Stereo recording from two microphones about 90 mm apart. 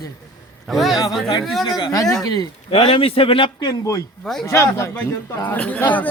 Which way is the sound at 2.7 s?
85° left.